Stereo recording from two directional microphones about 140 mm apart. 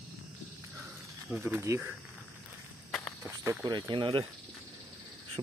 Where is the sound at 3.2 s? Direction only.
20° right (ahead or behind); by 4.2 s 35° right (ahead or behind).